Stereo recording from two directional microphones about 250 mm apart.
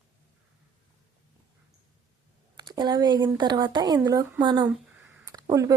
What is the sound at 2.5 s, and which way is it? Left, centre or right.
Speech, centre.